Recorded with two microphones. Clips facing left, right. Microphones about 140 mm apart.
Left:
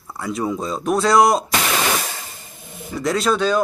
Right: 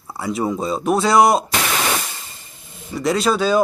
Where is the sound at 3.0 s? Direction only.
Centre (ahead or behind).